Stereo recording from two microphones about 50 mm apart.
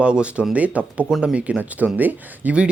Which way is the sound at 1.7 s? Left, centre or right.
Right.